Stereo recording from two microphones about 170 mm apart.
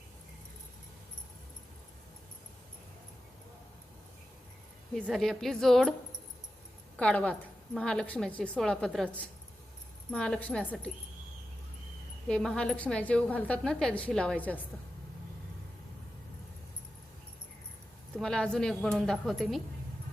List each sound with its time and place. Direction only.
5.0 s a woman's voice: centre (ahead or behind)
6.9 s a woman's voice: 5° left (ahead or behind)
12.3 s a woman's voice: 5° left (ahead or behind)
18.2 s a woman's voice: 5° left (ahead or behind)